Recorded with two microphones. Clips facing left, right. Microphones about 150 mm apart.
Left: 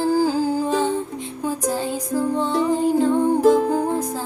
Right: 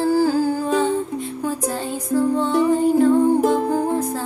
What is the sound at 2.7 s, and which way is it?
Music, 20° left (ahead or behind).